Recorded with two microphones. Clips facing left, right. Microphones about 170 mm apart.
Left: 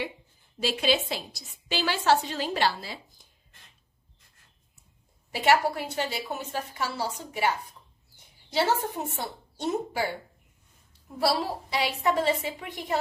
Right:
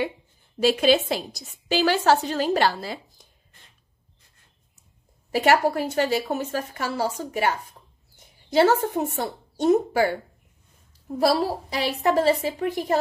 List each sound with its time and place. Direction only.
0.6 s a woman's voice: 50° right (ahead or behind)
5.3 s a woman's voice: 45° right (ahead or behind)
8.5 s a woman's voice: 50° right (ahead or behind)